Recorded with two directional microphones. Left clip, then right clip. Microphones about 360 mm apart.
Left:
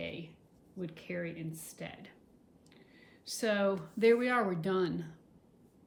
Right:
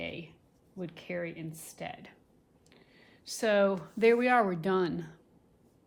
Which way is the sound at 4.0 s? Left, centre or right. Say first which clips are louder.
Right 3 dB; centre.